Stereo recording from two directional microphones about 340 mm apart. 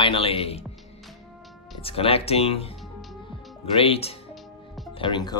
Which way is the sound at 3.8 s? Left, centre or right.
Centre.